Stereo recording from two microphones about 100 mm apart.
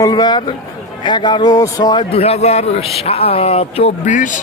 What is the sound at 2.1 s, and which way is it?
A man's voice, 80° left.